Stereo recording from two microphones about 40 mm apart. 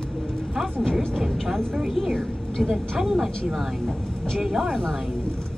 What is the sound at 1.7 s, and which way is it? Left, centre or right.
A woman's voice, centre.